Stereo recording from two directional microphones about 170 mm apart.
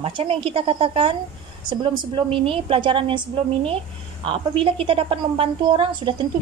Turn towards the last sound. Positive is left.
turn(degrees=-30)  # may be behind; listen again after turning